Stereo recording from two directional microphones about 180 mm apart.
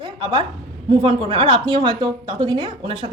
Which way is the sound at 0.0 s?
25° right (ahead or behind).